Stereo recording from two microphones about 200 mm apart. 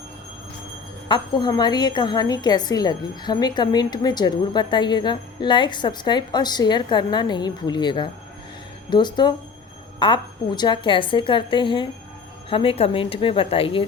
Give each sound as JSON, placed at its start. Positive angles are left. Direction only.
{"t": 1.0, "sound": "a woman's voice", "side_deg": 20}